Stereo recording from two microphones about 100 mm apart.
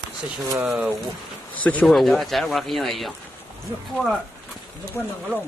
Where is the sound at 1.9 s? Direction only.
Centre (ahead or behind).